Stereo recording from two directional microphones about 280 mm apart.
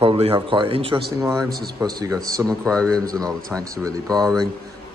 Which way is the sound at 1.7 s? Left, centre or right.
Centre.